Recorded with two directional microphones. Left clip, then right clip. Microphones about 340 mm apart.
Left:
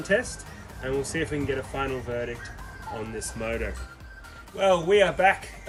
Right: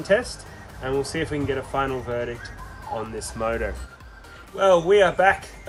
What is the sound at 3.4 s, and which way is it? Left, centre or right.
Speech, centre.